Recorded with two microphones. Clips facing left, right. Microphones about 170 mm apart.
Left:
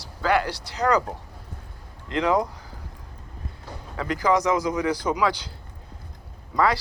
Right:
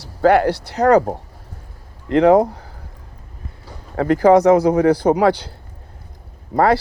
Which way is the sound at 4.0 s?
55° right (ahead or behind).